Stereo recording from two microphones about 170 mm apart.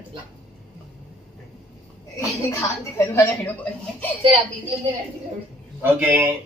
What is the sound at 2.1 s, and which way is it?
A woman's voice, 15° left (ahead or behind).